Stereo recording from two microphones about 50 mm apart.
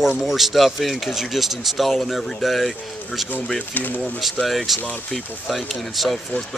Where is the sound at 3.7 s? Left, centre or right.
Left.